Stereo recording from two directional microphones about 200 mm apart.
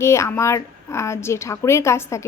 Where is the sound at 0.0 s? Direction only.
15° left (ahead or behind).